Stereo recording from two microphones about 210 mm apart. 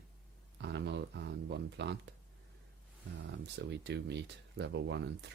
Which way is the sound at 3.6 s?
55° right (ahead or behind).